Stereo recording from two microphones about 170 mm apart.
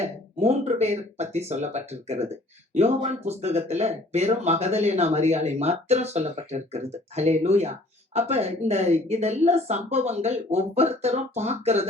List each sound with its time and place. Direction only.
0.0 s speech: 40° right (ahead or behind)